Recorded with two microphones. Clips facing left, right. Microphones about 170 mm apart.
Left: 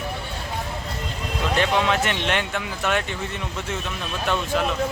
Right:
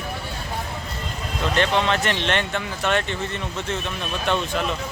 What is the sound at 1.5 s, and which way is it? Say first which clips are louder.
Speech: even; 10° left (ahead or behind).